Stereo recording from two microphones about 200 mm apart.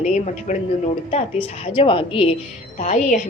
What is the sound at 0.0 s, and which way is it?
A woman's voice, 35° left (ahead or behind).